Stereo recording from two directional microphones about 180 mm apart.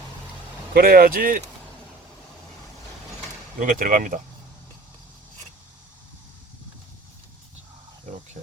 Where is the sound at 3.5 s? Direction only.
50° right (ahead or behind).